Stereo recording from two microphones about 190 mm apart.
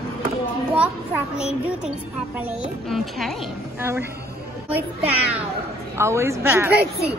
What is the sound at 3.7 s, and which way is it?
Speech, 10° right (ahead or behind).